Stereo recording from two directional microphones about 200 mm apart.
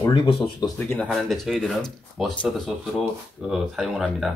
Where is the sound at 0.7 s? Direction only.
10° left (ahead or behind).